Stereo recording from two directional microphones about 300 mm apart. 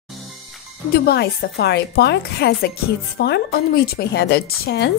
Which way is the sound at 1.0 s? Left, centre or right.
Left.